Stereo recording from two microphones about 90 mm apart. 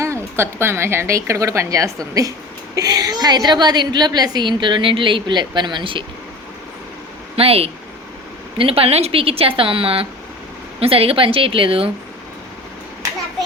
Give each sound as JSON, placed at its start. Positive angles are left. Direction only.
{"t": 0.0, "sound": "a woman's voice", "side_deg": -30}
{"t": 7.3, "sound": "a woman's voice", "side_deg": -90}